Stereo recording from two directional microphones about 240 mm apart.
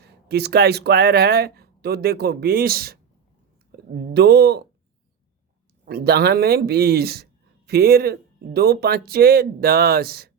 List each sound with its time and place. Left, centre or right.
0.0 s speech: right
5.8 s speech: right